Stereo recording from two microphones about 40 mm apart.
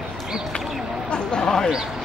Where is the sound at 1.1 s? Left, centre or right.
Left.